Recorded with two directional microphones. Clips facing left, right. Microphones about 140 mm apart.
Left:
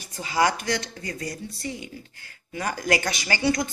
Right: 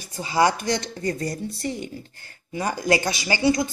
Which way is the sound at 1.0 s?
35° right (ahead or behind).